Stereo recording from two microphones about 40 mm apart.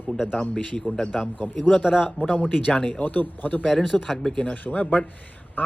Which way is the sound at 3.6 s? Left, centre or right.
Centre.